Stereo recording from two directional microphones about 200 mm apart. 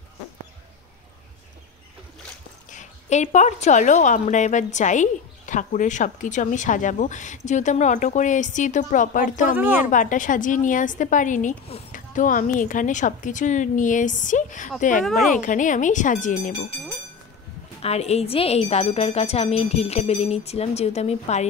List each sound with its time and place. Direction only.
2.7 s a woman's voice: 35° left (ahead or behind)
9.6 s a woman's voice: 10° right (ahead or behind)
9.8 s a woman's voice: 40° left (ahead or behind)
17.8 s a woman's voice: 30° left (ahead or behind)